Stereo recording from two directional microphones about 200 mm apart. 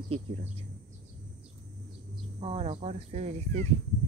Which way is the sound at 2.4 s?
30° right (ahead or behind).